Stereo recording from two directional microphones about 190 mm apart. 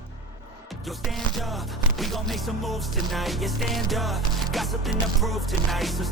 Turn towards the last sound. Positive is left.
turn(degrees=0)  # may be behind; listen again after turning